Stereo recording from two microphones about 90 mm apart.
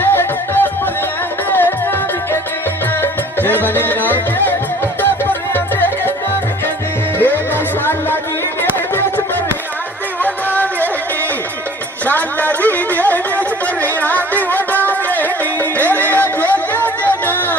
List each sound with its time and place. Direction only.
0.0 s music: 25° left (ahead or behind)
7.2 s music: 25° left (ahead or behind)
12.0 s a sound: 20° left (ahead or behind)
13.8 s music: 20° left (ahead or behind)